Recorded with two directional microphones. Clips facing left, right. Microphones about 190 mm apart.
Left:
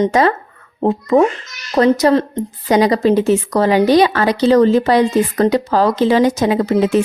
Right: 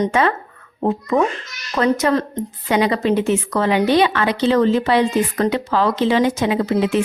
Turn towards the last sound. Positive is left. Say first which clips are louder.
# left 4 dB
turn(degrees=40)  # may be behind; listen again after turning